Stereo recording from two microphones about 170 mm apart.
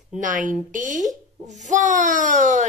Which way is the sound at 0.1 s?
50° right (ahead or behind).